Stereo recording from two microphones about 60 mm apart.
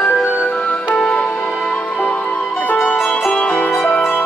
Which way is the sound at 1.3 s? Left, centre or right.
Left.